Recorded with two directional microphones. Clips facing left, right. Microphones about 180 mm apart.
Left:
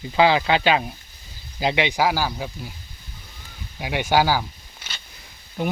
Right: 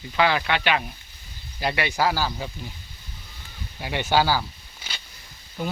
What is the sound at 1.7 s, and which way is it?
Speech, 15° left (ahead or behind).